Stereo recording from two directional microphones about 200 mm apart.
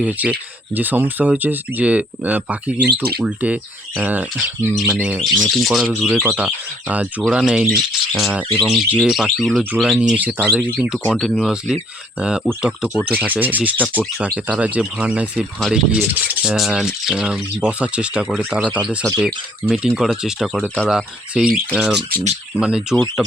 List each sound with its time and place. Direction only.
0.0 s speech: 10° right (ahead or behind)
2.8 s speech: 50° right (ahead or behind)
3.2 s speech: 5° right (ahead or behind)
22.1 s speech: 35° right (ahead or behind)
22.5 s speech: 5° right (ahead or behind)